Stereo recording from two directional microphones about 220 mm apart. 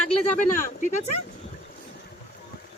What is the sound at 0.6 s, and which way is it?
Speech, 35° left (ahead or behind).